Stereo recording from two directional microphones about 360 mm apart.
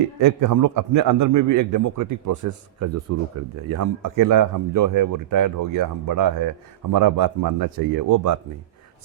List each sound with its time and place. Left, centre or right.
0.2 s a man's voice: right
3.7 s a man's voice: right